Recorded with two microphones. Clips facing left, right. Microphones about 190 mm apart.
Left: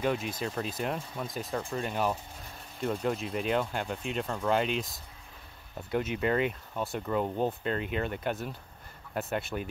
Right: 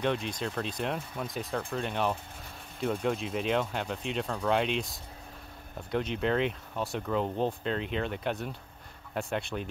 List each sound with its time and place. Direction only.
0.0 s speech: 5° left (ahead or behind)